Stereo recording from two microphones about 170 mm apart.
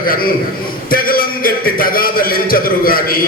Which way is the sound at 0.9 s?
55° left (ahead or behind).